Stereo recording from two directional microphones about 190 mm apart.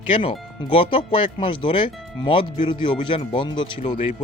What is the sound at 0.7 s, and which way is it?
Speech, 25° left (ahead or behind).